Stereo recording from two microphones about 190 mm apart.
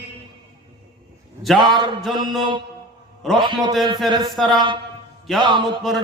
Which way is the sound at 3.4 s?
25° right (ahead or behind).